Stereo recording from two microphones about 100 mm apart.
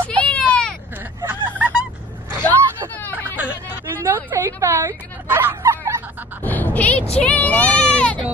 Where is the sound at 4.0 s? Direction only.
30° right (ahead or behind).